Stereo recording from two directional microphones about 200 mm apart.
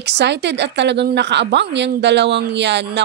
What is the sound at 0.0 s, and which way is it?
Speech, 60° right (ahead or behind).